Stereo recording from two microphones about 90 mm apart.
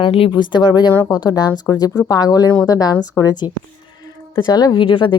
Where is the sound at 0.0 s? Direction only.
80° left; by 2.9 s 45° left (ahead or behind).